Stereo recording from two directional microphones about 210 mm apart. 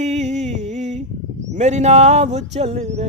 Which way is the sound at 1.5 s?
35° right (ahead or behind).